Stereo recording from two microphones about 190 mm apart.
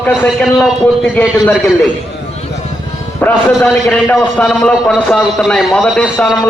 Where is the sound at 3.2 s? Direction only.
Centre (ahead or behind).